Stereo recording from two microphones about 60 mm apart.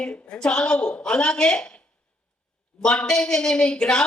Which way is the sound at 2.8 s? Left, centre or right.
Centre.